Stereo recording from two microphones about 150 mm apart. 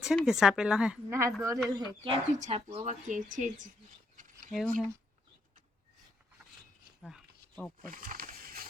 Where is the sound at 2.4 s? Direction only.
40° right (ahead or behind); by 3.7 s 60° right (ahead or behind).